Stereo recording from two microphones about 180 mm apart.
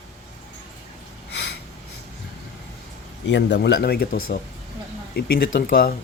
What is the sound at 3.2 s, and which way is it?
Speech, 75° left (ahead or behind).